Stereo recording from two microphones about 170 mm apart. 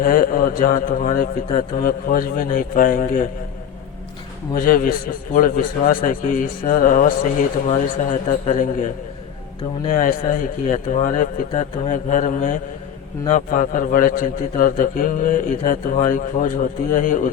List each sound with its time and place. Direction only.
0.0 s a man's voice: 55° left (ahead or behind)
4.5 s a man's voice: 55° left (ahead or behind)
9.9 s a man's voice: 50° left (ahead or behind)